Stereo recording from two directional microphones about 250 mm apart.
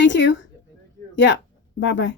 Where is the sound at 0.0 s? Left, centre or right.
Left.